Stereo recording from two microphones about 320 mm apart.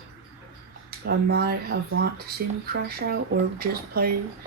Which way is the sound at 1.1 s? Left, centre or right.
Right.